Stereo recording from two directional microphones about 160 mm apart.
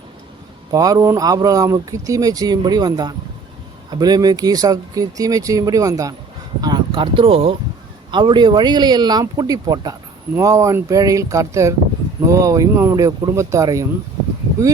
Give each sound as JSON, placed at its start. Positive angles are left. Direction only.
{"t": 0.7, "sound": "speech", "side_deg": -20}